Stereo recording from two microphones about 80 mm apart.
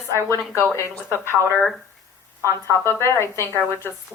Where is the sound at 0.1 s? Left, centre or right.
Left.